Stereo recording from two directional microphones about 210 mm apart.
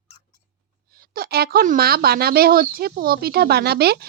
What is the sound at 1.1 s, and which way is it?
Speech, 45° right (ahead or behind).